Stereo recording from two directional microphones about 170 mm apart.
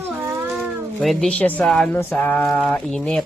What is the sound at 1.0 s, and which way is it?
Speech, centre (ahead or behind).